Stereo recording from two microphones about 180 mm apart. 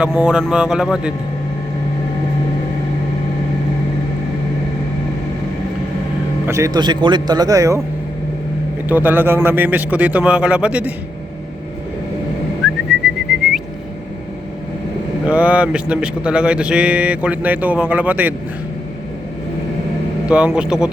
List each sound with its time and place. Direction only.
0.0 s speech: 5° right (ahead or behind)
6.5 s speech: 20° right (ahead or behind)
8.9 s speech: 10° right (ahead or behind)
12.6 s whistling: centre (ahead or behind)
15.3 s speech: 5° right (ahead or behind)
20.2 s speech: 5° right (ahead or behind)